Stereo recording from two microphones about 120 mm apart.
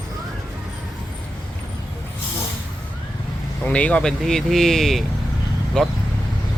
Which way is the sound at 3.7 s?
10° left (ahead or behind).